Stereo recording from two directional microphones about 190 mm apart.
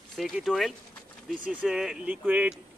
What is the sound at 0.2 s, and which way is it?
Speech, centre (ahead or behind).